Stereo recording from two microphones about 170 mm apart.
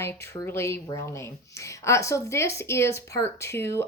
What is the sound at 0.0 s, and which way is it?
A woman's voice, 15° left (ahead or behind).